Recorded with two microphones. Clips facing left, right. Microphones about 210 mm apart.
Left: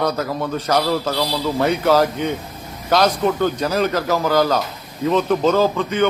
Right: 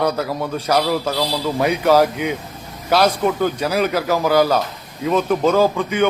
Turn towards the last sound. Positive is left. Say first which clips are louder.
# right 1 dB
turn(degrees=-10)  # may be behind; listen again after turning